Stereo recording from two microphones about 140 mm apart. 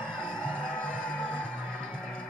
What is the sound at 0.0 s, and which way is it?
Music, 5° left (ahead or behind).